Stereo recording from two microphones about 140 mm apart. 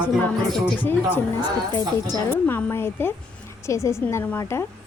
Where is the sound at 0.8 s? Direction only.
15° left (ahead or behind).